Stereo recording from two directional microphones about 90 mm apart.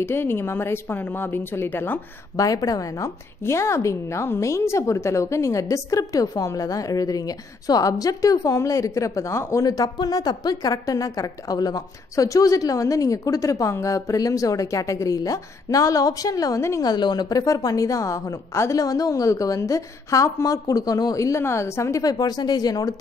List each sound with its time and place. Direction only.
0.0 s a woman's voice: 25° left (ahead or behind)
2.3 s a woman's voice: 40° left (ahead or behind)
16.8 s a woman's voice: 50° left (ahead or behind)